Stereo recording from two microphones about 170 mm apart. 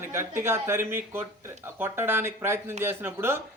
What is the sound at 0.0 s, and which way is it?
A man's voice, 15° right (ahead or behind).